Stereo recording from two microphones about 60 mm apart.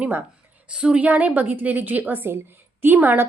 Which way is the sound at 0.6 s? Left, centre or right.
Centre.